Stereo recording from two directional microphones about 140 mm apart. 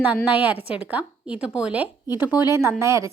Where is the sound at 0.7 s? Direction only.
10° right (ahead or behind).